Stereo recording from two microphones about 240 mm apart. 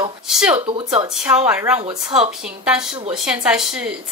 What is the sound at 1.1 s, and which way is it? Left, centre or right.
A woman's voice, centre.